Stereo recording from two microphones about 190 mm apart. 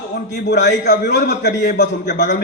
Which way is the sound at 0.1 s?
65° left (ahead or behind).